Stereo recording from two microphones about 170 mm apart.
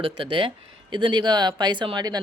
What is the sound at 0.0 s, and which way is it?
Speech, 30° right (ahead or behind).